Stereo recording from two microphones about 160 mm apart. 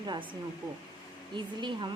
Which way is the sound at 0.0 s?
25° right (ahead or behind).